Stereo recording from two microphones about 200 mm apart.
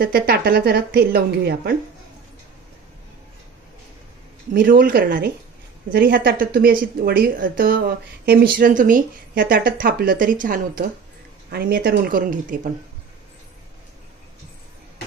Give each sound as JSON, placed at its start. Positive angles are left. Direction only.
{"t": 0.0, "sound": "speech", "side_deg": -45}
{"t": 4.6, "sound": "speech", "side_deg": -45}